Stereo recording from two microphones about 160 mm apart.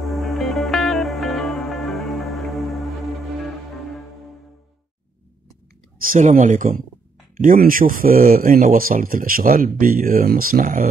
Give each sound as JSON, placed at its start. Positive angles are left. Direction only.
{"t": 0.0, "sound": "music", "side_deg": 0}
{"t": 6.1, "sound": "speech", "side_deg": -50}